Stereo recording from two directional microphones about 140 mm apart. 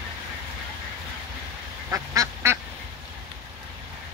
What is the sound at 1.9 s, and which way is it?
Duck, 20° right (ahead or behind).